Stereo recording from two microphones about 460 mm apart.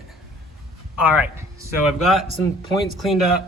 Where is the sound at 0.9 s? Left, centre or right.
Centre.